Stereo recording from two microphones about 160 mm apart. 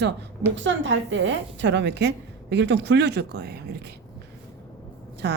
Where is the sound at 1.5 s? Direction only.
90° right.